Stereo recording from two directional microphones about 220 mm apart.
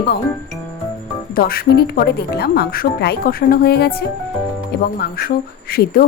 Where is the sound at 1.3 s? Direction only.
40° left (ahead or behind).